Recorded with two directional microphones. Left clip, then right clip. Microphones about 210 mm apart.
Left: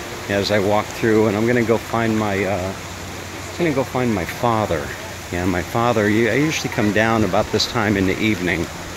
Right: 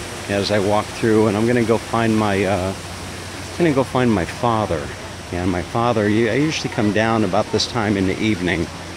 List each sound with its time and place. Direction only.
0.3 s speech: centre (ahead or behind)
3.6 s speech: 15° right (ahead or behind)
4.4 s speech: centre (ahead or behind)